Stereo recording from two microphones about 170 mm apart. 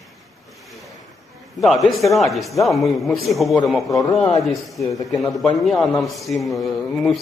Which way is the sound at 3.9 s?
20° left (ahead or behind).